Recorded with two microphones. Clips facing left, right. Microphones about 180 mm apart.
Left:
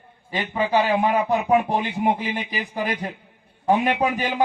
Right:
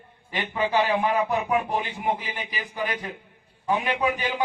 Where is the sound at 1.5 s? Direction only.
35° left (ahead or behind).